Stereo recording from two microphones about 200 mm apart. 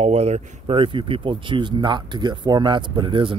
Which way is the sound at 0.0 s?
35° right (ahead or behind).